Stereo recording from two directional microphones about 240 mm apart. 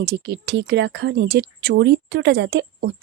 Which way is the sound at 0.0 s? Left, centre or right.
Right.